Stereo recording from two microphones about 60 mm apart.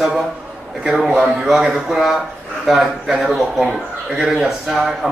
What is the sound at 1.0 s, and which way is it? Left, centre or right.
Speech, right.